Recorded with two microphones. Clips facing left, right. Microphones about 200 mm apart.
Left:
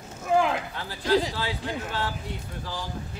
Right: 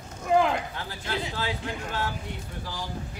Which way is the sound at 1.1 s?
35° left (ahead or behind).